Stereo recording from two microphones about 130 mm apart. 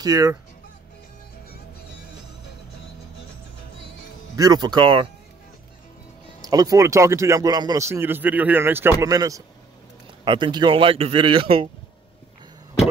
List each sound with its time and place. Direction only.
0.0 s speech: 25° right (ahead or behind)
4.4 s speech: 30° right (ahead or behind)
6.4 s speech: 30° right (ahead or behind)
10.2 s speech: 35° right (ahead or behind)